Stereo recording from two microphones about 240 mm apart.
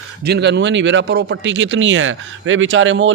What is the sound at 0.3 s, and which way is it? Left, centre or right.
Speech, right.